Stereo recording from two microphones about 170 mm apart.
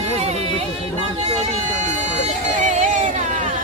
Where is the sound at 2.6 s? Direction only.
50° right (ahead or behind).